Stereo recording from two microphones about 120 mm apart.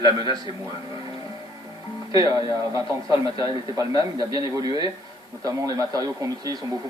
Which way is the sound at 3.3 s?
30° right (ahead or behind).